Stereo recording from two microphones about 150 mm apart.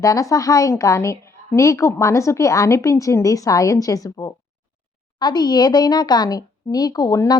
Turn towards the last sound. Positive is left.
turn(degrees=25)  # may be behind; listen again after turning